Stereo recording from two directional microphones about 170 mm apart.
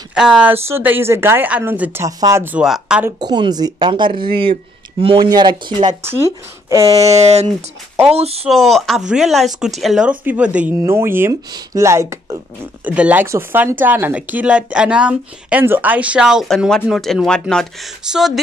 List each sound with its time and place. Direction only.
0.1 s speech: 5° right (ahead or behind)
3.2 s speech: 25° right (ahead or behind)
6.9 s a sound: 40° right (ahead or behind)
7.4 s speech: 15° right (ahead or behind)
8.1 s a sound: 35° right (ahead or behind)
8.5 s speech: centre (ahead or behind)